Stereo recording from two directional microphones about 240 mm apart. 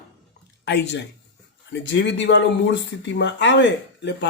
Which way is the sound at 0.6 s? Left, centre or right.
Left.